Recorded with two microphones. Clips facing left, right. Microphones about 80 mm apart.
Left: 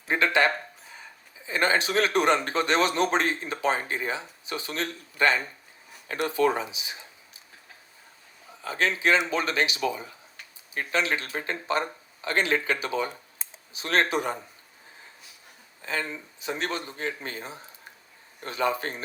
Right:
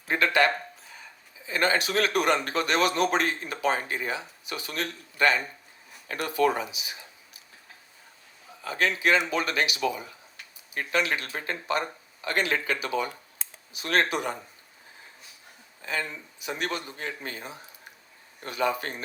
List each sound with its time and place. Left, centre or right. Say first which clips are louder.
0.1 s a man's voice: even; left
8.6 s a man's voice: even; left
15.9 s a man's voice: left 1 dB; left